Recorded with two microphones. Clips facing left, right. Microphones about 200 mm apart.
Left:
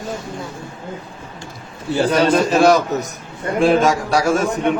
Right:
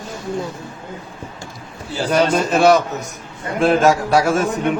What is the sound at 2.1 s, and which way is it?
Speech, 5° right (ahead or behind).